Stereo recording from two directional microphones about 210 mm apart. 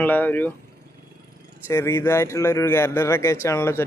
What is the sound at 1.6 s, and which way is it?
A man's voice, 10° left (ahead or behind).